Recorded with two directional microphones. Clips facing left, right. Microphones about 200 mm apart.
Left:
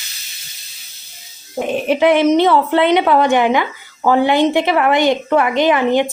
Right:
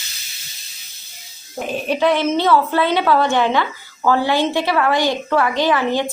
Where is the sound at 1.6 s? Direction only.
20° left (ahead or behind).